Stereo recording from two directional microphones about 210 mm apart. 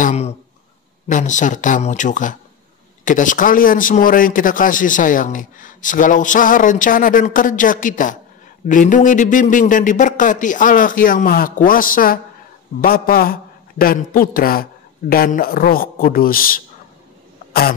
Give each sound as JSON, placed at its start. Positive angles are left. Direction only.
{"t": 0.0, "sound": "a man's voice", "side_deg": 30}
{"t": 17.5, "sound": "cough", "side_deg": 45}